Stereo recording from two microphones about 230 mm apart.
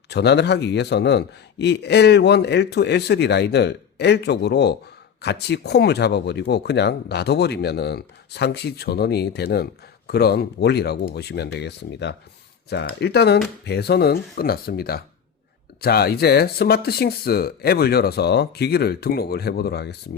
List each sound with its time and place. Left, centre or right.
0.1 s a man's voice: left